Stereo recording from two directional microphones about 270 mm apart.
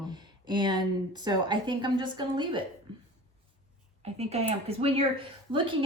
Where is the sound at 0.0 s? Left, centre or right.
Centre.